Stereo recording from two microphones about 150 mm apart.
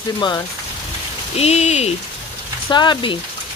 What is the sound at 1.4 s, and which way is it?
Speech, 45° left (ahead or behind).